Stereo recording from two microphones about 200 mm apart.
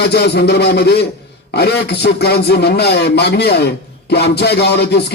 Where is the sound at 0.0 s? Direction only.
55° left (ahead or behind).